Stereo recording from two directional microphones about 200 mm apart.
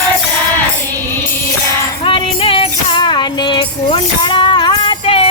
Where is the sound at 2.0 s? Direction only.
25° left (ahead or behind).